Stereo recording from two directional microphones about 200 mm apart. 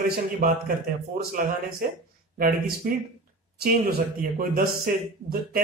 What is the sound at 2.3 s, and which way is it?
A man's voice, 50° right (ahead or behind).